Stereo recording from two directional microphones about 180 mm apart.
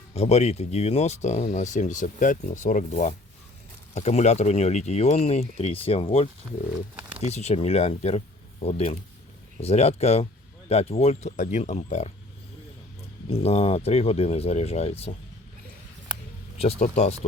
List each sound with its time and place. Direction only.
0.1 s speech: 35° left (ahead or behind)
13.3 s speech: 35° left (ahead or behind)
16.6 s speech: 35° left (ahead or behind)